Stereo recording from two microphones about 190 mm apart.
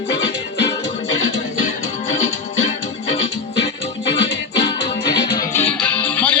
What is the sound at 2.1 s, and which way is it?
Music, 35° left (ahead or behind).